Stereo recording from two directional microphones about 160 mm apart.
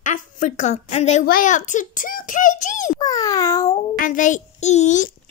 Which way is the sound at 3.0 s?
20° left (ahead or behind).